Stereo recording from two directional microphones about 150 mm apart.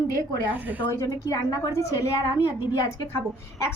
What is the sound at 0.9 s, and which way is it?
A woman's voice, 25° left (ahead or behind).